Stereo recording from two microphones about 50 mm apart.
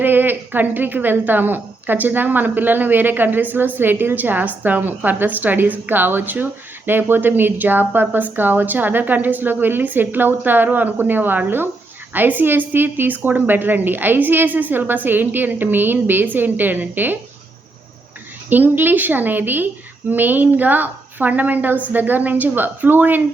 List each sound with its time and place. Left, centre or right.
0.0 s a woman's voice: right
18.4 s a woman's voice: right